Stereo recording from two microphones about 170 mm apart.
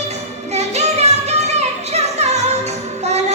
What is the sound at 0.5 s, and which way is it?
Music, 40° right (ahead or behind).